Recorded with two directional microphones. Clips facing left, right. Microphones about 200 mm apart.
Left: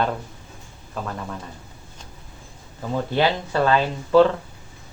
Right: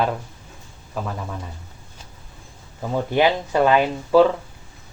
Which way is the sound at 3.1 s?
15° right (ahead or behind).